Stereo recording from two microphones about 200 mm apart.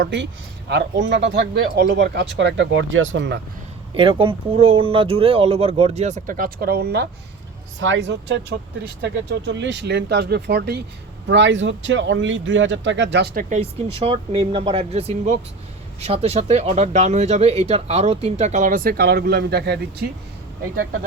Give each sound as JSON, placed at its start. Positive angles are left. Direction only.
{"t": 0.0, "sound": "speech", "side_deg": -60}
{"t": 3.9, "sound": "speech", "side_deg": -25}
{"t": 7.8, "sound": "speech", "side_deg": -70}
{"t": 11.3, "sound": "speech", "side_deg": -65}
{"t": 14.0, "sound": "speech", "side_deg": -25}